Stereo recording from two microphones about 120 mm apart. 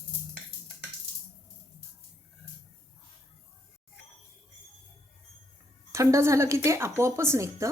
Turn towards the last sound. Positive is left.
turn(degrees=-25)  # may be behind; listen again after turning